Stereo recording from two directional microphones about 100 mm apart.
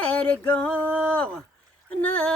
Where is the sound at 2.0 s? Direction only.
15° left (ahead or behind).